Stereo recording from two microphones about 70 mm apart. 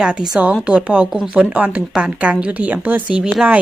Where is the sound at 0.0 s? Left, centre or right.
Centre.